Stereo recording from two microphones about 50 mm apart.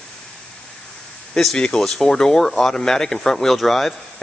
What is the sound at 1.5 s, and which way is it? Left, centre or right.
Speech, centre.